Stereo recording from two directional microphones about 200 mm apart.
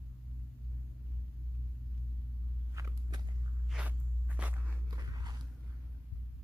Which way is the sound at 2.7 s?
15° right (ahead or behind).